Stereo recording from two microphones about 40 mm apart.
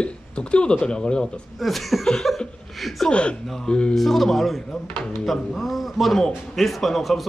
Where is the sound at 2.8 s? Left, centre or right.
Centre.